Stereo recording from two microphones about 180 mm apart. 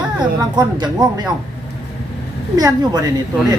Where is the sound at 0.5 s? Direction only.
20° right (ahead or behind).